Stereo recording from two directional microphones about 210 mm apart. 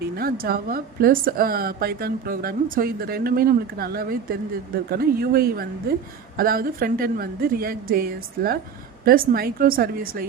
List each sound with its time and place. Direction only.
0.2 s a woman's voice: 45° right (ahead or behind)